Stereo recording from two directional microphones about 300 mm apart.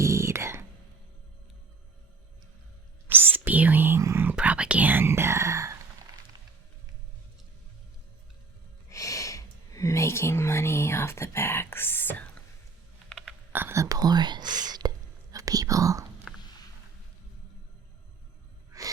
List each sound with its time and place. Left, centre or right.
0.0 s a sound: centre
3.4 s whispering: centre
8.9 s whispering: centre
18.7 s music: centre